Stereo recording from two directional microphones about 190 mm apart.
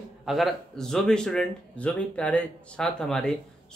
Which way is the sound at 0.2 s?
Centre (ahead or behind).